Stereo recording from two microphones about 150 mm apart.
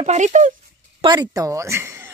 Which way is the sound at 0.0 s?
50° right (ahead or behind).